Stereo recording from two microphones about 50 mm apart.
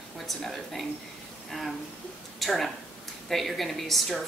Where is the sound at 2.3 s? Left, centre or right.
Centre.